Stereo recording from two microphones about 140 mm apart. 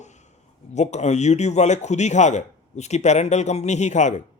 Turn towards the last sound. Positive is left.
turn(degrees=60)  # may be behind; listen again after turning